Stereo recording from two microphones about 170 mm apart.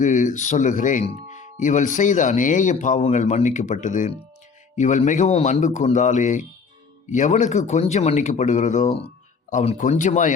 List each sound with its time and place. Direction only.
0.0 s speech: 45° left (ahead or behind)